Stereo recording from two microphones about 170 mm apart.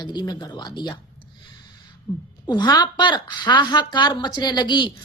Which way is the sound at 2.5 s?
25° left (ahead or behind).